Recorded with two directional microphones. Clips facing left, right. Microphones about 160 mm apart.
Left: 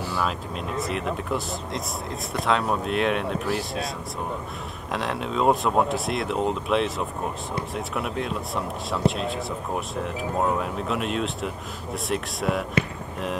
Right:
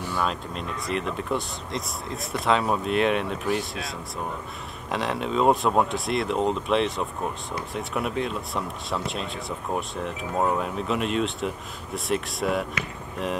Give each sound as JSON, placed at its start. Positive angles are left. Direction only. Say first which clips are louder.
{"t": 0.1, "sound": "speech", "louder": "right 2 dB", "side_deg": 0}
{"t": 4.9, "sound": "speech", "louder": "right 1 dB", "side_deg": 0}